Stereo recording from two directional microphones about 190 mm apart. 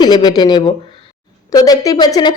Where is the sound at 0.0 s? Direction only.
20° left (ahead or behind).